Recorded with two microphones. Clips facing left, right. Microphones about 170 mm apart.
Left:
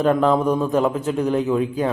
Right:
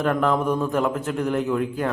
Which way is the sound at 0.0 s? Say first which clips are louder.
Left 4 dB; 20° left (ahead or behind).